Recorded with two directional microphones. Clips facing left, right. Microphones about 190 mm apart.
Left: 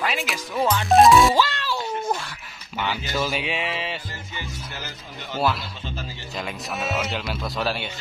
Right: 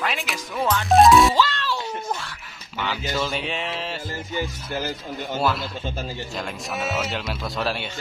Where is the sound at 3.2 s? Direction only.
5° left (ahead or behind).